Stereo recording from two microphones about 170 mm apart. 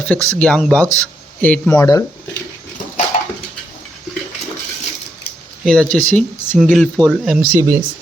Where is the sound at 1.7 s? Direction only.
20° left (ahead or behind).